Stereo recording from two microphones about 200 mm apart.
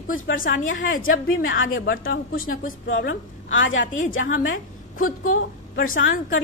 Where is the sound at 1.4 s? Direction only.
75° left (ahead or behind).